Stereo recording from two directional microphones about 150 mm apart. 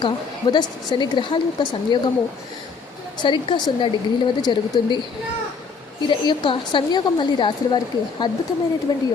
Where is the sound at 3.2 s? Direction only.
30° left (ahead or behind).